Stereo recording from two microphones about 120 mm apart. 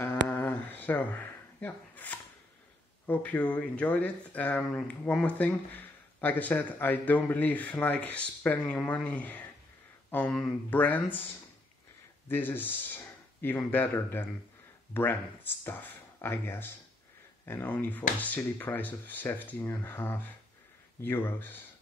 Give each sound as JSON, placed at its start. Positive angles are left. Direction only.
{"t": 0.0, "sound": "a sound", "side_deg": 15}
{"t": 3.1, "sound": "speech", "side_deg": 15}
{"t": 12.3, "sound": "speech", "side_deg": 15}